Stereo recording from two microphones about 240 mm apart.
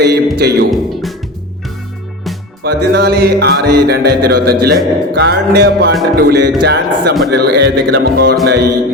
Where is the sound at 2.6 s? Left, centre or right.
Right.